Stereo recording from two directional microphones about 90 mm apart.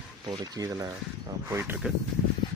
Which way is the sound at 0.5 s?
40° right (ahead or behind).